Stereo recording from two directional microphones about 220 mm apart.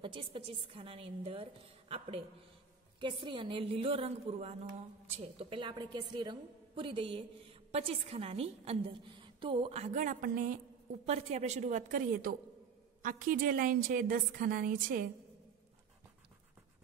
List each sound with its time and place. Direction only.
0.0 s a woman's voice: 25° right (ahead or behind); by 15.0 s 40° right (ahead or behind)